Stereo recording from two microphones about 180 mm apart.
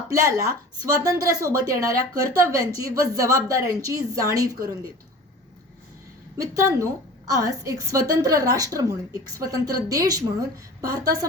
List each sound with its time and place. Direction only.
0.1 s a woman's voice: 20° right (ahead or behind)
6.3 s a woman's voice: 20° right (ahead or behind)